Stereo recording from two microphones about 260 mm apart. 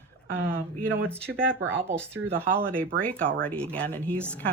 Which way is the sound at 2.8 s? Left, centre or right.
Right.